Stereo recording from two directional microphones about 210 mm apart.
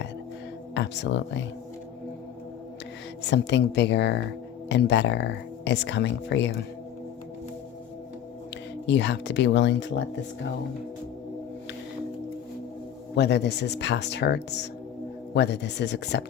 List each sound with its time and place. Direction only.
0.7 s speech: 55° left (ahead or behind)
3.2 s speech: 55° left (ahead or behind)
8.9 s speech: 55° left (ahead or behind)
13.1 s speech: 55° left (ahead or behind)